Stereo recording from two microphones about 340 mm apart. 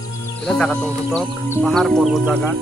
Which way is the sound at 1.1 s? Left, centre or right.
Centre.